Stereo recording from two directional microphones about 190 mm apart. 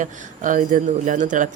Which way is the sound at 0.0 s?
45° right (ahead or behind).